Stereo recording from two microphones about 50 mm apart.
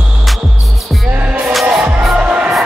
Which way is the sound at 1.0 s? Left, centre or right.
Right.